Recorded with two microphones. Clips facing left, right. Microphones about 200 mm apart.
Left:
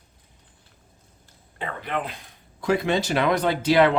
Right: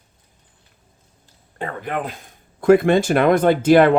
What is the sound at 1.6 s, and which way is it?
Speech, 45° right (ahead or behind).